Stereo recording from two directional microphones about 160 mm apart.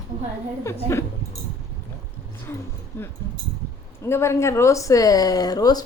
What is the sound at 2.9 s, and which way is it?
Speech, 15° left (ahead or behind).